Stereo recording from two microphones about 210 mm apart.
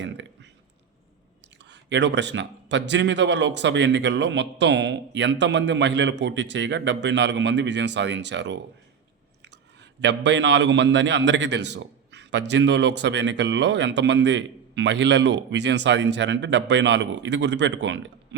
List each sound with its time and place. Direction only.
1.7 s a man's voice: 55° right (ahead or behind)
10.0 s a man's voice: 55° right (ahead or behind)